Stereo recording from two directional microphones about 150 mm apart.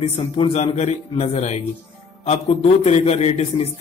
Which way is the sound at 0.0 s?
40° left (ahead or behind).